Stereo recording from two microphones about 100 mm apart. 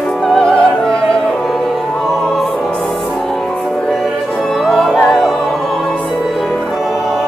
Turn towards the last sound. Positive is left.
turn(degrees=5)  # may be behind; listen again after turning